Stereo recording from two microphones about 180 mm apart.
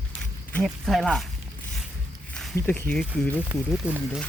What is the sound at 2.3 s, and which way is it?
Speech, 10° left (ahead or behind).